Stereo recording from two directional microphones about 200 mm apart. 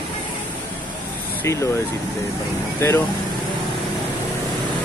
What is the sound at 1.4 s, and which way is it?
Speech, 15° left (ahead or behind).